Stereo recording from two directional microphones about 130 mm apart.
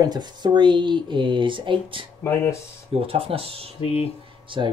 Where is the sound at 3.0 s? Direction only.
45° right (ahead or behind).